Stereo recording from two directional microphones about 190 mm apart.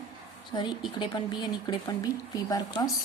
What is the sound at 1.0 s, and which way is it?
A woman's voice, 25° left (ahead or behind).